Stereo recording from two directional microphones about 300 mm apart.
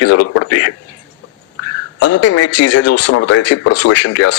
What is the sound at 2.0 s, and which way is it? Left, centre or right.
A man's voice, left.